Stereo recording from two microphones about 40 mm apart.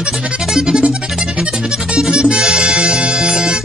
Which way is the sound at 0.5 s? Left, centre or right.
Centre.